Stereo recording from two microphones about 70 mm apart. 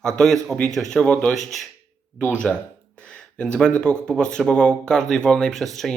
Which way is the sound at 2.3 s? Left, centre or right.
Centre.